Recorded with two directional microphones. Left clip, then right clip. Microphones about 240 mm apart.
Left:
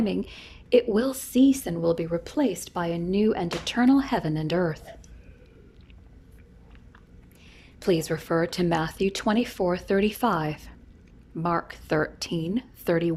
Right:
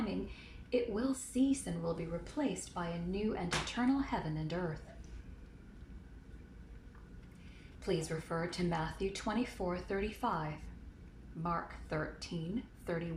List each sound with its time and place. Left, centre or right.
0.3 s a woman's voice: left
8.0 s a woman's voice: left
11.4 s a woman's voice: left